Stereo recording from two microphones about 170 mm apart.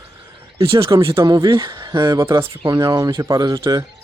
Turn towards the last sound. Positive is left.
turn(degrees=-20)  # may be behind; listen again after turning